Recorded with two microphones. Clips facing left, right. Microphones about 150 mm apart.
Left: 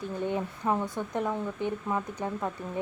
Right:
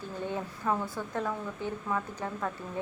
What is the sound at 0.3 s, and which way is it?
A woman's voice, 20° left (ahead or behind).